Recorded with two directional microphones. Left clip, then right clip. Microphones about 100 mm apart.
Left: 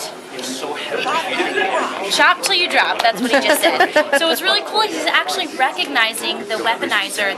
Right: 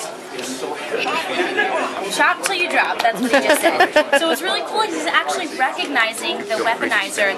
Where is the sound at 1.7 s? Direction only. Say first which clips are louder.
Left 3 dB; 10° left (ahead or behind).